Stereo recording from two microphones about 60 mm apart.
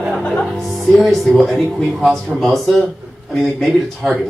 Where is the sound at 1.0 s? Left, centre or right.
Centre.